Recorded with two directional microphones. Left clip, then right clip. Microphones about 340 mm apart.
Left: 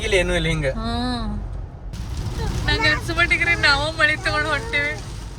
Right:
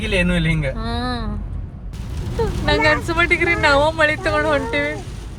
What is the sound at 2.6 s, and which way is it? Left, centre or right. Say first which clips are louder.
Speech: right 3 dB; centre.